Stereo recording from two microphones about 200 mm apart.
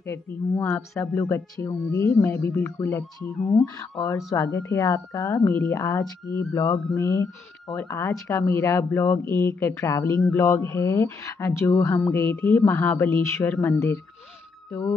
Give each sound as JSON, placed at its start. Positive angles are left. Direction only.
{"t": 0.0, "sound": "speech", "side_deg": 15}